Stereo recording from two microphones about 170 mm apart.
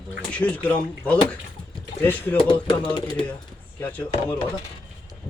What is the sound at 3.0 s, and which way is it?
Speech, 25° left (ahead or behind).